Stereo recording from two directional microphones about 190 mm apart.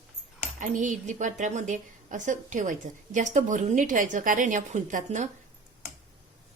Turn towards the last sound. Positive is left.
turn(degrees=-40)  # may be behind; listen again after turning